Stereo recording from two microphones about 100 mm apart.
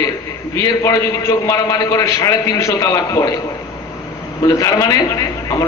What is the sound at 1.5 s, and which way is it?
A man's voice, 35° left (ahead or behind).